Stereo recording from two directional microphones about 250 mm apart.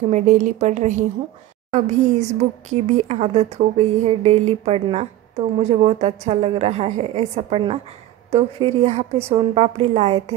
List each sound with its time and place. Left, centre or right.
0.1 s speech: right